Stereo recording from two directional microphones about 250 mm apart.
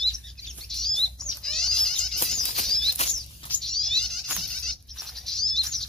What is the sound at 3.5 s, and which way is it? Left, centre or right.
Insect, centre.